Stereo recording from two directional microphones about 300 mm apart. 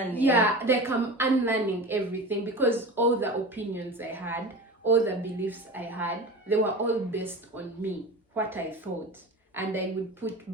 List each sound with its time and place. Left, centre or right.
0.2 s a woman's voice: centre